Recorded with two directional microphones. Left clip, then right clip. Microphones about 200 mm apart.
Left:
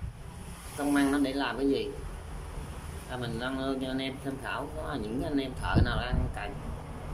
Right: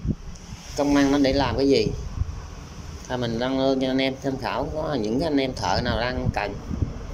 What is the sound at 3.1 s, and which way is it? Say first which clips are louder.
Speech: right 10 dB; 30° right (ahead or behind).